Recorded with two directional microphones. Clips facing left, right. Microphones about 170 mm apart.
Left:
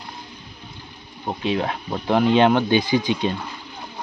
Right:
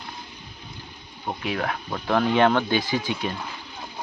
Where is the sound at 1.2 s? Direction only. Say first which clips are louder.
Left 4 dB; 25° left (ahead or behind).